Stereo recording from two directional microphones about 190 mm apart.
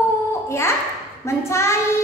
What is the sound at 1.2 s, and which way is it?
Speech, 15° left (ahead or behind).